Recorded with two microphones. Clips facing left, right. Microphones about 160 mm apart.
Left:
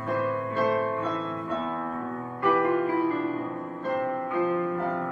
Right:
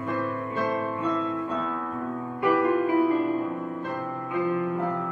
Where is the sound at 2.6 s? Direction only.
15° right (ahead or behind).